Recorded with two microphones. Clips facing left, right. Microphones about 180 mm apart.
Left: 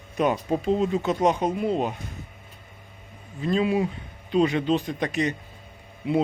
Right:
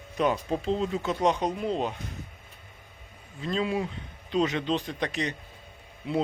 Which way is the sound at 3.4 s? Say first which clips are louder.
Left 5 dB; 15° left (ahead or behind).